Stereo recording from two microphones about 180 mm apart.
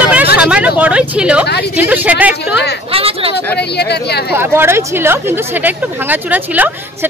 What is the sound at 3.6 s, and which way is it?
Speech, 65° left (ahead or behind).